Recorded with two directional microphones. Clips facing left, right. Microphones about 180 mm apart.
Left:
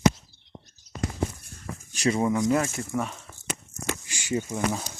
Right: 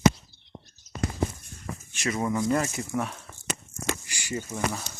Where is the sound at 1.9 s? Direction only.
35° left (ahead or behind).